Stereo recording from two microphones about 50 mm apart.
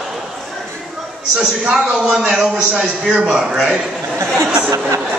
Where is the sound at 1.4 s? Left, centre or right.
Centre.